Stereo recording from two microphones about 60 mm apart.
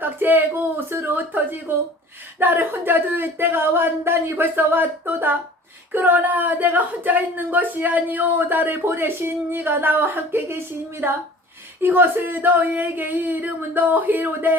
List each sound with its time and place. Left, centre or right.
0.0 s speech: right
11.8 s speech: right